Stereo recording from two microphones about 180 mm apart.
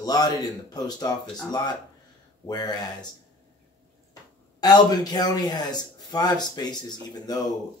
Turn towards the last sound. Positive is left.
turn(degrees=20)  # may be behind; listen again after turning